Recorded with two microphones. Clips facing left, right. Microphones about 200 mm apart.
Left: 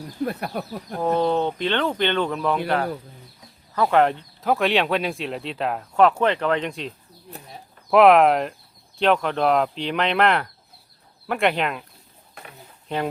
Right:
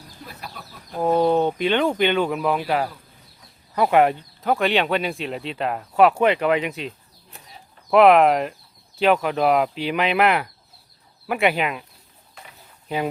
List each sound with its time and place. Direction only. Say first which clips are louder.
0.3 s speech: left 12 dB; 60° left (ahead or behind)
1.0 s speech: right 3 dB; 10° right (ahead or behind)
3.8 s speech: right 1 dB; 15° right (ahead or behind)
12.9 s speech: right 1 dB; 5° right (ahead or behind)